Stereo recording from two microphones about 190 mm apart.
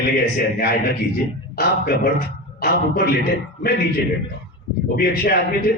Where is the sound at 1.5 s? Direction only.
55° left (ahead or behind).